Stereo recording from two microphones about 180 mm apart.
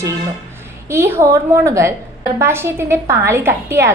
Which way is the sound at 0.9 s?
15° right (ahead or behind).